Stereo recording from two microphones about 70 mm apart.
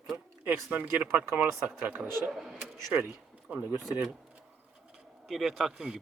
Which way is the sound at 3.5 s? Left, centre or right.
Centre.